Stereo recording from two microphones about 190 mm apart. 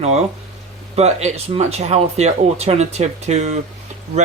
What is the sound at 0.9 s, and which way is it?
Speech, 35° right (ahead or behind).